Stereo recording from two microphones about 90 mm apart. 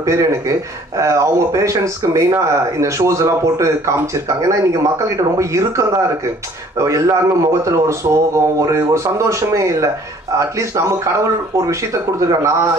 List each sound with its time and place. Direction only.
0.0 s speech: 35° right (ahead or behind)